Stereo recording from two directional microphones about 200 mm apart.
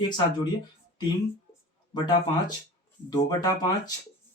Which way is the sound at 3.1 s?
20° left (ahead or behind).